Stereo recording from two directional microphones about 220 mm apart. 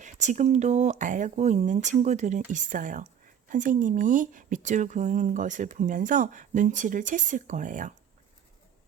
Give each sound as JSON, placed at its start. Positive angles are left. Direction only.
{"t": 0.0, "sound": "speech", "side_deg": -35}